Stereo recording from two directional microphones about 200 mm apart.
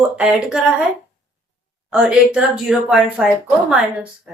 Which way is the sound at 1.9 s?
5° right (ahead or behind).